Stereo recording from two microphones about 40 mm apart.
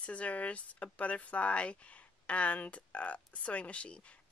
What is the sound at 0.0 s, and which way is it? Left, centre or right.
Speech, left.